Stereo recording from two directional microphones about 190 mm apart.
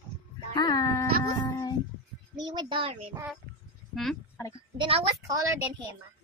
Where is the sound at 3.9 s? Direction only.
Centre (ahead or behind).